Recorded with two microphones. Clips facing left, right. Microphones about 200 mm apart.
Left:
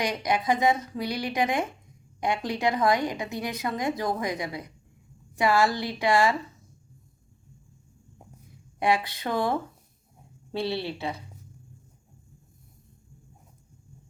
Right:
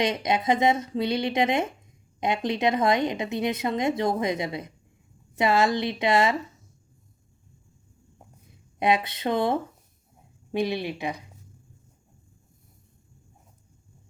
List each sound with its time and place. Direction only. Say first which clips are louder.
0.0 s a woman's voice: right 2 dB; 25° right (ahead or behind)
8.8 s a woman's voice: right 2 dB; 20° right (ahead or behind)